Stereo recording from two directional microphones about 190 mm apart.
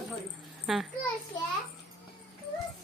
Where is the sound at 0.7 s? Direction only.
Centre (ahead or behind).